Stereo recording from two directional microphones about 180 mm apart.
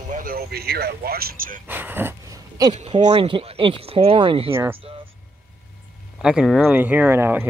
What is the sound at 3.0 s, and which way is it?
Speech, 35° right (ahead or behind).